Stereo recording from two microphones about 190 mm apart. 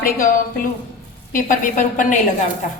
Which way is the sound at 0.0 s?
45° left (ahead or behind).